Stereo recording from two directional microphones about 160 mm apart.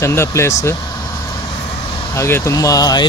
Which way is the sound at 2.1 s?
15° left (ahead or behind).